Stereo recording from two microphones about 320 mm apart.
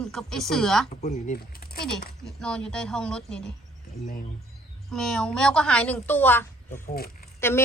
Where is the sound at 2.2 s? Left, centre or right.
Centre.